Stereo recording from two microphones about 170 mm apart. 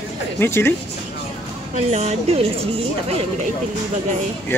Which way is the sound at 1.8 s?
40° right (ahead or behind).